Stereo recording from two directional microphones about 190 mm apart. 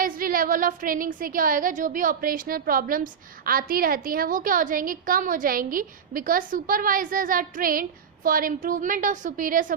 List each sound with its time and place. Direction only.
0.0 s a woman's voice: 50° right (ahead or behind)